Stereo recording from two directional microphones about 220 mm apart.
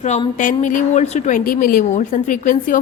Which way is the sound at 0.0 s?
30° left (ahead or behind).